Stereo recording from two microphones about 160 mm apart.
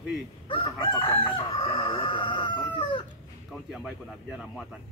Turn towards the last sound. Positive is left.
turn(degrees=-5)  # may be behind; listen again after turning